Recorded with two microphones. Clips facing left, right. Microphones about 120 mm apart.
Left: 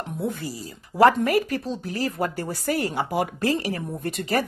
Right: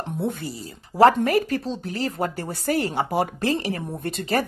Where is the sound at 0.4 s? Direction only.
30° right (ahead or behind).